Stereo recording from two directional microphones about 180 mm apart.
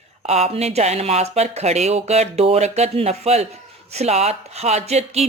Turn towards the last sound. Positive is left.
turn(degrees=-35)  # may be behind; listen again after turning